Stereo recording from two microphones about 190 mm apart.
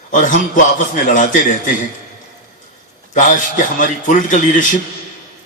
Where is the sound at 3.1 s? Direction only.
40° left (ahead or behind).